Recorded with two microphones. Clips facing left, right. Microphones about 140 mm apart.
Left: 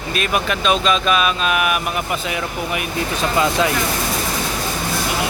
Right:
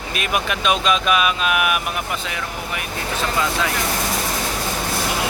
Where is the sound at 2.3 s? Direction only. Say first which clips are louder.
Left 5 dB; 15° left (ahead or behind).